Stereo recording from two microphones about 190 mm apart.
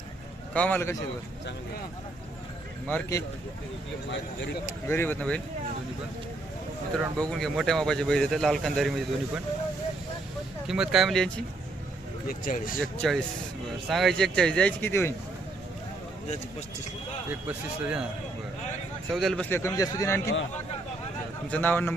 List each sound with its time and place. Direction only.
0.5 s a man's voice: 5° left (ahead or behind)
2.8 s a man's voice: 10° left (ahead or behind)
4.9 s a man's voice: 10° left (ahead or behind)
7.2 s speech: 5° left (ahead or behind)
10.7 s speech: centre (ahead or behind)
12.3 s speech: 45° left (ahead or behind)
12.8 s speech: centre (ahead or behind)
17.5 s speech: 5° right (ahead or behind)
19.1 s a man's voice: centre (ahead or behind); by 20.2 s 15° left (ahead or behind)
21.5 s a man's voice: 10° left (ahead or behind)